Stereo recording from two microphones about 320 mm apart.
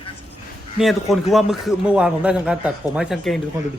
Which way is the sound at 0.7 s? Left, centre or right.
Centre.